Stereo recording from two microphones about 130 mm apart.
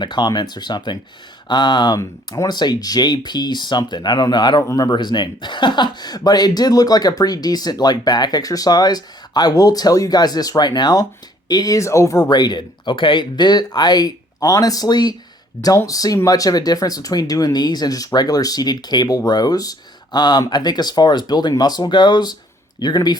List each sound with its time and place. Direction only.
0.0 s speech: 35° left (ahead or behind)
12.3 s speech: 35° left (ahead or behind)